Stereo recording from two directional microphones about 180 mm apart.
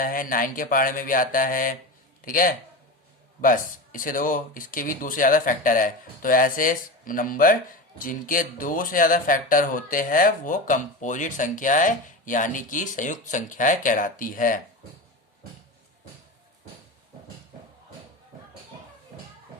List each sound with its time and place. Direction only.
0.0 s speech: 50° left (ahead or behind)